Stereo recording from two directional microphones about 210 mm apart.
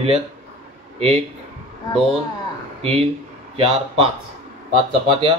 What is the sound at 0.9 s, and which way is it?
Speech, 30° right (ahead or behind).